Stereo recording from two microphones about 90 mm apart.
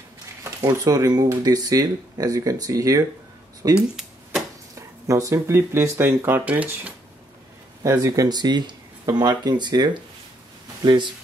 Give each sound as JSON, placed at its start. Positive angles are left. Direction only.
{"t": 0.7, "sound": "speech", "side_deg": -45}
{"t": 3.7, "sound": "a sound", "side_deg": -5}
{"t": 4.7, "sound": "speech", "side_deg": -35}
{"t": 7.8, "sound": "speech", "side_deg": -35}